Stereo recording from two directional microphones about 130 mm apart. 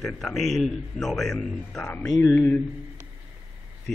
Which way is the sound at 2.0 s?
30° left (ahead or behind).